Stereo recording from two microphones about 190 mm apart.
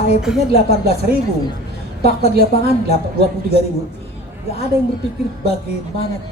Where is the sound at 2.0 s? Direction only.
55° right (ahead or behind).